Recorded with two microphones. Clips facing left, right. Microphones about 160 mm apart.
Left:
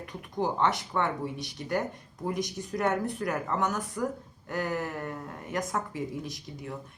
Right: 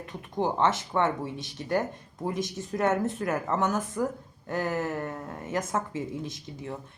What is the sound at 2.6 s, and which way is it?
Speech, 20° right (ahead or behind).